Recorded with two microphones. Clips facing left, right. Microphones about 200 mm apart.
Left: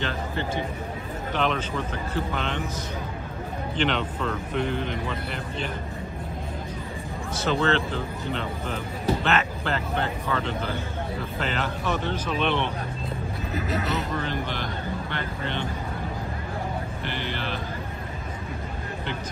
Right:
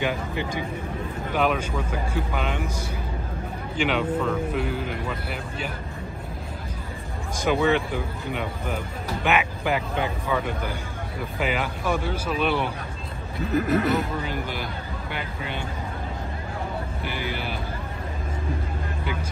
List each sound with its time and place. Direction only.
0.0 s speech: 10° right (ahead or behind)
3.7 s speech: 10° right (ahead or behind)
7.3 s speech: 15° right (ahead or behind)
13.6 s speech: 55° right (ahead or behind)
14.2 s speech: 10° right (ahead or behind)
17.0 s speech: 10° right (ahead or behind)